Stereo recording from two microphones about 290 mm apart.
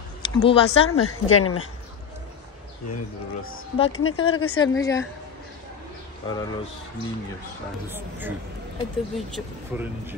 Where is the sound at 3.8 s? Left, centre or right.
Left.